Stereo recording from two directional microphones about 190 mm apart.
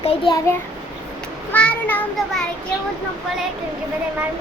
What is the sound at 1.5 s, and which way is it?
Child singing, 10° left (ahead or behind).